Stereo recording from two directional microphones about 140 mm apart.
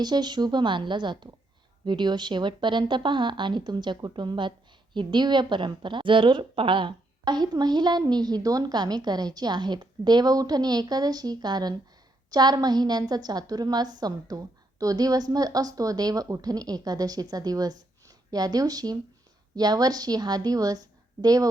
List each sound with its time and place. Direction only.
0.0 s a woman's voice: 30° right (ahead or behind)